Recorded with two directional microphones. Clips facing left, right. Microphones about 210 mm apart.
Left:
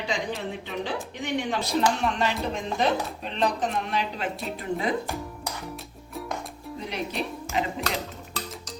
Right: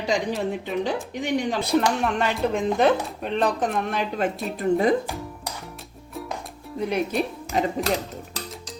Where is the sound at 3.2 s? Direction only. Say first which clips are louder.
Right 4 dB; 50° right (ahead or behind).